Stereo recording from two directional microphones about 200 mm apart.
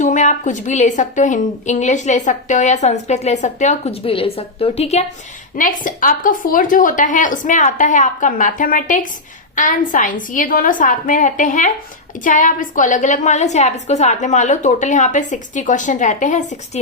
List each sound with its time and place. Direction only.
0.0 s a woman's voice: 40° left (ahead or behind)
5.5 s a woman's voice: 40° left (ahead or behind)